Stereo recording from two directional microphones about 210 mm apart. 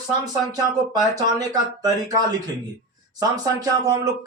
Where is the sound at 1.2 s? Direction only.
15° right (ahead or behind).